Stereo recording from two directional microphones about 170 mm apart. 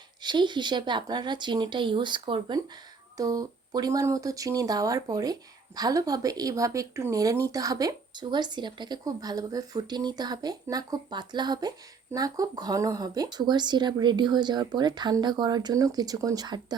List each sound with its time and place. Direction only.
0.2 s speech: 25° right (ahead or behind)